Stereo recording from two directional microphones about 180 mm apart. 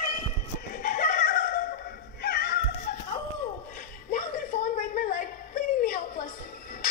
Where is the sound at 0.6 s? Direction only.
50° left (ahead or behind).